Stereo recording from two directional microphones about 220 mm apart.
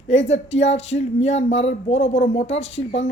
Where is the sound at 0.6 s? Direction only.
30° left (ahead or behind).